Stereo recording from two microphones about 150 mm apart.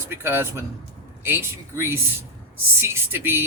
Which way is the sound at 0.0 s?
15° right (ahead or behind).